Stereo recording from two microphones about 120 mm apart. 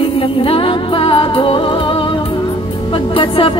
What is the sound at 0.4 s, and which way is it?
Music, 50° left (ahead or behind).